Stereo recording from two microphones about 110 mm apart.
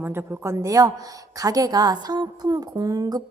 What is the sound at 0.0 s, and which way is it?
A woman's voice, 20° right (ahead or behind).